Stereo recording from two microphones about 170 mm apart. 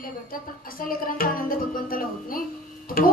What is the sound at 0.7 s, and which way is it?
Music, 55° left (ahead or behind).